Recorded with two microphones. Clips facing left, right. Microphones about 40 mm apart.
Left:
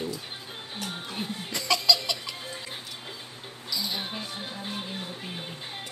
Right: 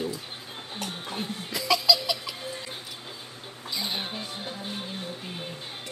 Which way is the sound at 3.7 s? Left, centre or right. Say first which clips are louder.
Even; right.